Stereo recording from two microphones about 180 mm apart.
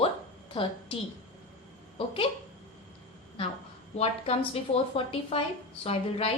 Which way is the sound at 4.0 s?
35° left (ahead or behind).